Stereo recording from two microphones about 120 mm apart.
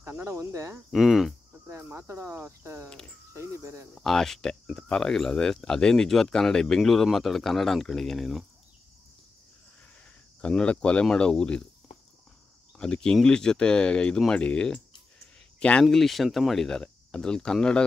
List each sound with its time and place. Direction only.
0.0 s speech: 25° right (ahead or behind)
0.9 s speech: centre (ahead or behind)
1.7 s speech: 20° right (ahead or behind)
3.9 s speech: centre (ahead or behind)
10.4 s speech: 10° left (ahead or behind)
12.7 s speech: 5° left (ahead or behind)